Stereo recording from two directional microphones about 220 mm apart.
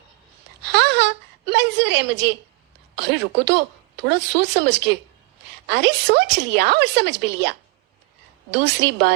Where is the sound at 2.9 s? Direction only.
50° right (ahead or behind).